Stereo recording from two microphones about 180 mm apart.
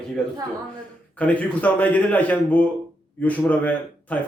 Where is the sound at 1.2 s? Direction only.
10° left (ahead or behind).